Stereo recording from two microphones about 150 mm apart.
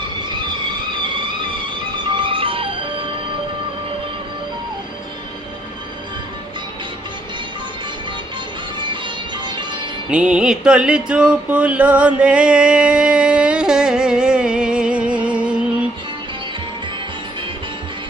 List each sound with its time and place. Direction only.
2.0 s music: 35° right (ahead or behind)
10.1 s music: 5° right (ahead or behind)